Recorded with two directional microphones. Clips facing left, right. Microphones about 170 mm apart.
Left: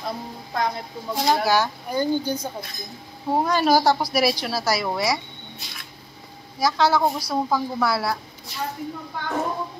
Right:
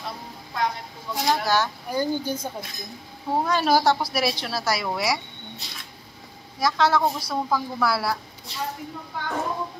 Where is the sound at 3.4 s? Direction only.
5° left (ahead or behind).